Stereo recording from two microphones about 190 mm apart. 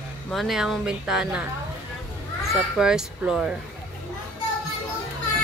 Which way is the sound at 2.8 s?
5° right (ahead or behind).